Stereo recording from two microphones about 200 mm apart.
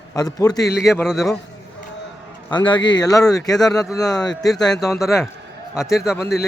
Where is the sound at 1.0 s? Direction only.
Centre (ahead or behind).